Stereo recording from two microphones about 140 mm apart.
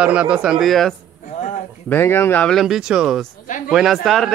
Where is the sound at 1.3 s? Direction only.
60° left (ahead or behind).